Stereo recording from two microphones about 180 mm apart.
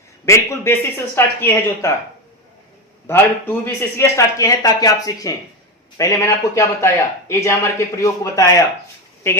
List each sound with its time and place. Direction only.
0.3 s a man's voice: 15° left (ahead or behind)
3.1 s a man's voice: 15° left (ahead or behind)